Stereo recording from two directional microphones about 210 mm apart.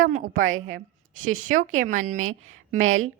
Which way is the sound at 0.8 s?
40° right (ahead or behind).